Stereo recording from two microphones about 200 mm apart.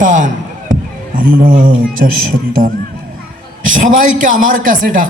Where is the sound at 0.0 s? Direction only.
40° right (ahead or behind).